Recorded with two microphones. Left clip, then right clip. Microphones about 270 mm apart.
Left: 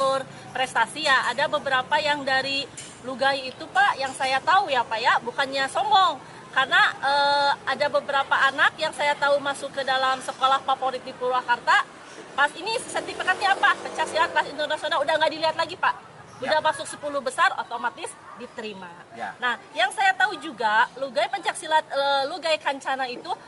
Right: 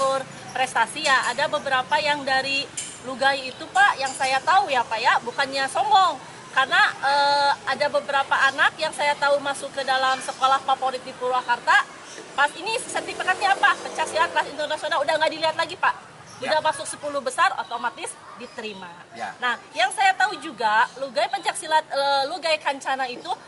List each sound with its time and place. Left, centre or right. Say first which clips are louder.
0.0 s a sound: right 1 dB; left
0.5 s speech: right 1 dB; centre
11.4 s speech: right 2 dB; centre
17.5 s a woman's voice: right 1 dB; left
19.2 s speech: right 1 dB; centre